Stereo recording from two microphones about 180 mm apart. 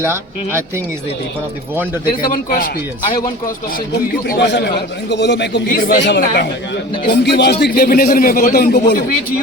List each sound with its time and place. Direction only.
0.0 s speech: 15° right (ahead or behind)
1.7 s speech: 10° right (ahead or behind)
2.0 s a man's voice: 50° left (ahead or behind)
4.4 s a man's voice: 75° left (ahead or behind); by 6.0 s 55° left (ahead or behind)
6.0 s a man's voice: 65° left (ahead or behind)